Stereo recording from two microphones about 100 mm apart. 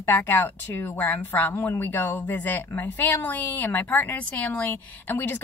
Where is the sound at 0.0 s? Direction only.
20° left (ahead or behind).